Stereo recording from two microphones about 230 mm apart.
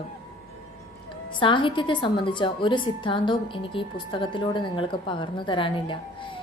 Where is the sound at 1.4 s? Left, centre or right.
Left.